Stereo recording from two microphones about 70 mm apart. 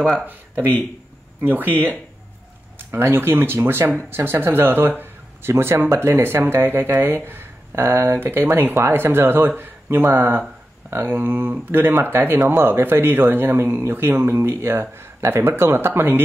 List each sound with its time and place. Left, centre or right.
0.0 s speech: centre
0.3 s speech: right
2.9 s speech: right